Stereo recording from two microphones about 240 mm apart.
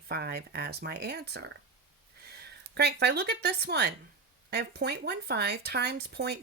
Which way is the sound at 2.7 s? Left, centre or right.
Right.